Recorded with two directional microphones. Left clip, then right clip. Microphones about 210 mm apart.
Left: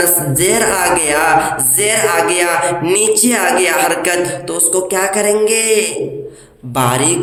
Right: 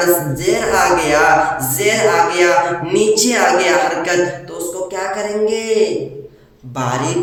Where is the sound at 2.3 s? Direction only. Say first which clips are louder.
Right 1 dB; 50° left (ahead or behind).